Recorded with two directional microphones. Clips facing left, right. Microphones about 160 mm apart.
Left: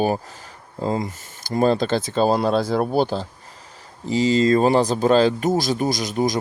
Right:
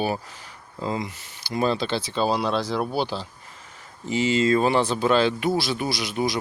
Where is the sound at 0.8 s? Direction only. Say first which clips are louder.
Left 4 dB; 40° left (ahead or behind).